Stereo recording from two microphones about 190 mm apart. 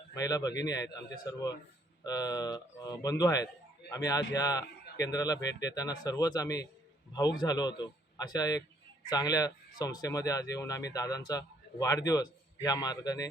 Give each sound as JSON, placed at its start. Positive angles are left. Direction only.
{"t": 0.1, "sound": "speech", "side_deg": 20}
{"t": 2.0, "sound": "speech", "side_deg": 20}